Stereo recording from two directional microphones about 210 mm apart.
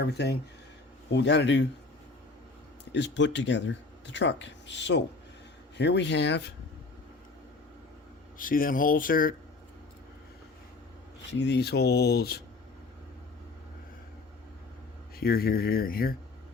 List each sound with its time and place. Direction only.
0.0 s speech: 50° left (ahead or behind)
2.9 s speech: 60° left (ahead or behind)
8.4 s speech: 40° left (ahead or behind)
11.3 s speech: 55° left (ahead or behind)
15.2 s speech: 45° left (ahead or behind)